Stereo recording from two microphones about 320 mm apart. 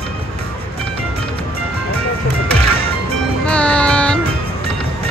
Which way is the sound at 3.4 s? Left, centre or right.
Centre.